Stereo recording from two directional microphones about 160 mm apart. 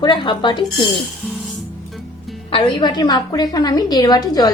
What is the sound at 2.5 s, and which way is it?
A woman's voice, 30° left (ahead or behind).